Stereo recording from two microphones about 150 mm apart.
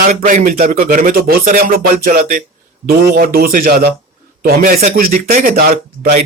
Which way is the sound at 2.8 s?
80° right.